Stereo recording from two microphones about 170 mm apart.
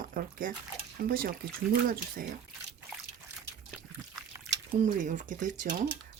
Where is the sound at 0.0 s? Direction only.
55° right (ahead or behind).